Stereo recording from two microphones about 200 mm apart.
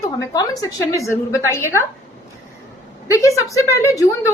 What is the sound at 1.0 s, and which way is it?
Speech, 15° left (ahead or behind).